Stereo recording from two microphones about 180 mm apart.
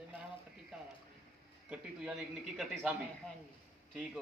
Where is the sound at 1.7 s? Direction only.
Centre (ahead or behind).